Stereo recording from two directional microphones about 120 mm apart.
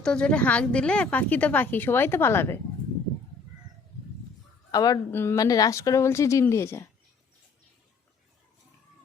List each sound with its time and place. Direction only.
0.0 s a woman's voice: 10° left (ahead or behind)
4.7 s a woman's voice: 30° left (ahead or behind)